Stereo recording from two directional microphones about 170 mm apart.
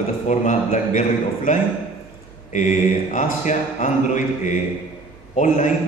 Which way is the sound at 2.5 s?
45° left (ahead or behind).